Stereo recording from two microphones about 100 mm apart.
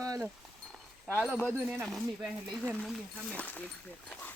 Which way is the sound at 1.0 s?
10° left (ahead or behind).